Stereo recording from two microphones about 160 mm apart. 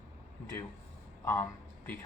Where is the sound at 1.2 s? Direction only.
15° left (ahead or behind).